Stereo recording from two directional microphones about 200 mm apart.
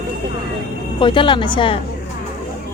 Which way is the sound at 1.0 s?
25° left (ahead or behind).